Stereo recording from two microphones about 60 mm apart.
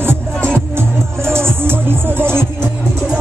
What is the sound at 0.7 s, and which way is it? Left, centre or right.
Music, right.